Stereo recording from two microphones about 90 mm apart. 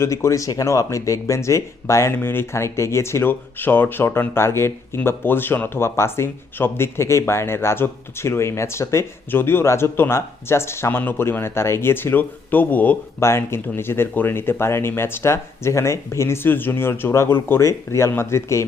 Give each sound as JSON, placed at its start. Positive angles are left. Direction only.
{"t": 0.0, "sound": "speech", "side_deg": 35}
{"t": 13.1, "sound": "speech", "side_deg": 30}